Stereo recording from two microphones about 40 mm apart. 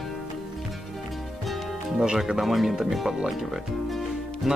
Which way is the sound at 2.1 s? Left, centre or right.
Centre.